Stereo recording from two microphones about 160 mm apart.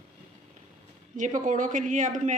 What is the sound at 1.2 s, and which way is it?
Speech, 50° right (ahead or behind).